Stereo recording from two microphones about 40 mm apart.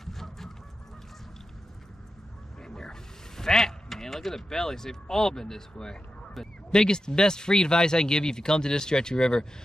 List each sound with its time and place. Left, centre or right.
0.0 s fowl: centre
2.6 s speech: centre